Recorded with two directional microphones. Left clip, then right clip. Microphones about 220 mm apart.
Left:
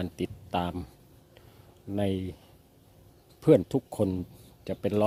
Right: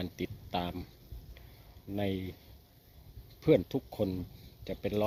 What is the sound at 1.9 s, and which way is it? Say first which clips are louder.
Speech: left 5 dB; 20° left (ahead or behind).